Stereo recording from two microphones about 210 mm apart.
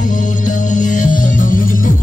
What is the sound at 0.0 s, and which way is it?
Music, 40° left (ahead or behind).